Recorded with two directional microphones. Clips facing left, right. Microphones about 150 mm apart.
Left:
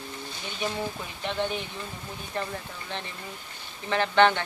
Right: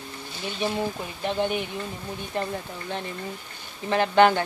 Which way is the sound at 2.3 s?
30° right (ahead or behind).